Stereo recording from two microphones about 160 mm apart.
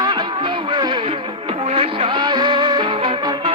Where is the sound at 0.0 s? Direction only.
30° right (ahead or behind).